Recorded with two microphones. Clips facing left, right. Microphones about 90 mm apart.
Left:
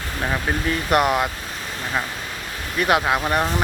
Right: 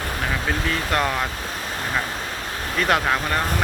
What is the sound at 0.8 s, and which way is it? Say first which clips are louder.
Speech: left 6 dB; 15° left (ahead or behind).